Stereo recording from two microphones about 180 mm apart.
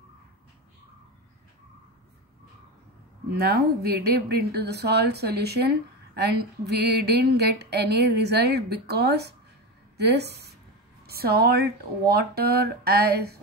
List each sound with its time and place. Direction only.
3.3 s a woman's voice: 65° right (ahead or behind)